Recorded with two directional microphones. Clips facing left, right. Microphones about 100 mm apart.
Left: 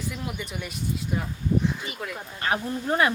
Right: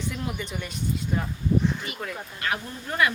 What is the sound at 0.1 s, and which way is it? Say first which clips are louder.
Speech: right 1 dB; 5° left (ahead or behind).